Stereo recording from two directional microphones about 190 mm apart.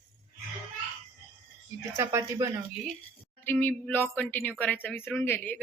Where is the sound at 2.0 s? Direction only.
15° right (ahead or behind).